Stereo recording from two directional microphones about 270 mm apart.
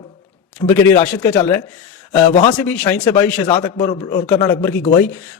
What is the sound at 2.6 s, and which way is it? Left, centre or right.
A man's voice, centre.